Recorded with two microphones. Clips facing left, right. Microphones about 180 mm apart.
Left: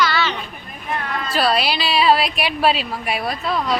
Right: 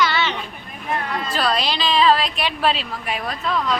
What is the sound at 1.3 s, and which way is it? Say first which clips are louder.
A woman's voice: left 4 dB; 10° left (ahead or behind).